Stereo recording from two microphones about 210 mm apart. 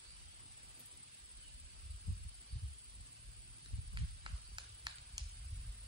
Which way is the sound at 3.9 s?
20° right (ahead or behind).